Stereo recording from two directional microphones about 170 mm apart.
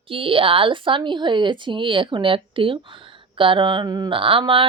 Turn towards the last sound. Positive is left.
turn(degrees=-30)  # may be behind; listen again after turning